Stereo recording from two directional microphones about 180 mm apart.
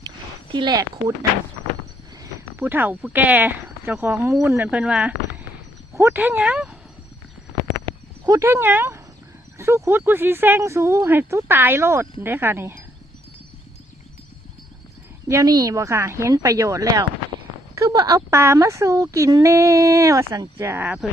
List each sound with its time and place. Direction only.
0.5 s speech: 25° right (ahead or behind)
2.2 s speech: 10° right (ahead or behind)
8.3 s speech: 15° right (ahead or behind)
15.3 s speech: 20° right (ahead or behind)